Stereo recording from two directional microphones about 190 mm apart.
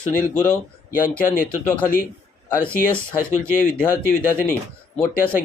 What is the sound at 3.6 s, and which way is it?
Speech, 45° left (ahead or behind).